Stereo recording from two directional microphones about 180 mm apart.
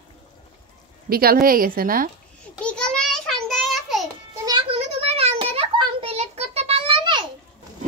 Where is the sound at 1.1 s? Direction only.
55° right (ahead or behind).